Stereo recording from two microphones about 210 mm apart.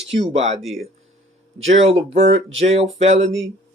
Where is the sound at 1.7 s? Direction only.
30° right (ahead or behind).